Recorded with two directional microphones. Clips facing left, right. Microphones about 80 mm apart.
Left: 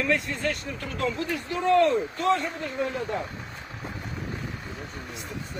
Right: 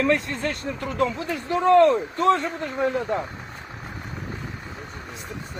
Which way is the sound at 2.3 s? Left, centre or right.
Right.